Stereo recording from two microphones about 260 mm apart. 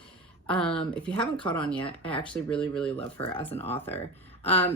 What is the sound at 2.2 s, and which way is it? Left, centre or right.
Speech, centre.